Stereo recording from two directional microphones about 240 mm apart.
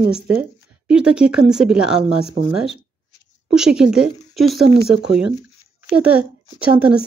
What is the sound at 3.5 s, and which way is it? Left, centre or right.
Speech, centre.